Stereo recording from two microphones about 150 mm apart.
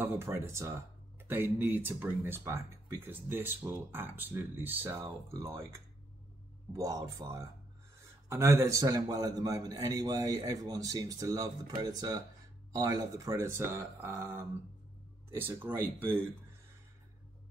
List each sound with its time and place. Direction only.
0.0 s a man's voice: 15° right (ahead or behind)
6.7 s a man's voice: 25° right (ahead or behind)